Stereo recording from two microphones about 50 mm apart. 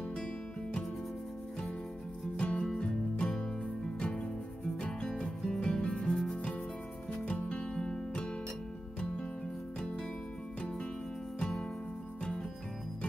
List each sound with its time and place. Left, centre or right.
0.1 s music: centre
2.3 s music: left
7.2 s music: left
10.6 s music: left